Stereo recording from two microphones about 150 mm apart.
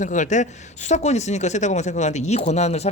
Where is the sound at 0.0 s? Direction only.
55° left (ahead or behind).